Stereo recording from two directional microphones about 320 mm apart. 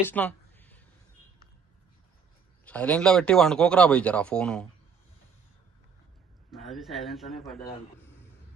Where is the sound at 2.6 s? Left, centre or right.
Centre.